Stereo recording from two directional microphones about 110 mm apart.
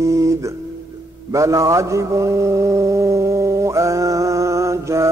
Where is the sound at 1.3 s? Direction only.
30° right (ahead or behind).